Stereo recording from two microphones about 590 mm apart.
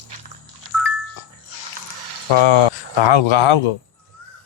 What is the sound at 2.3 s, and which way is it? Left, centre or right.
A man's voice, left.